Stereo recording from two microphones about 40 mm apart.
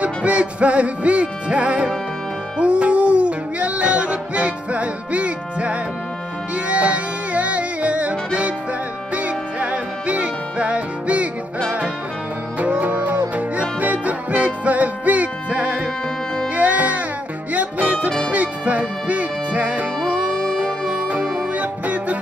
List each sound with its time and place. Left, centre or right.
0.0 s music: right
12.5 s music: right
20.6 s music: centre
21.4 s music: right